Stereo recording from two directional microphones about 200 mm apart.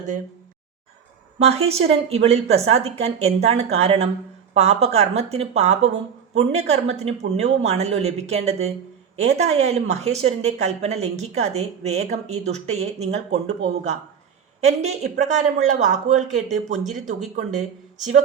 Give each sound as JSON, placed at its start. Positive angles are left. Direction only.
{"t": 1.4, "sound": "a woman's voice", "side_deg": -30}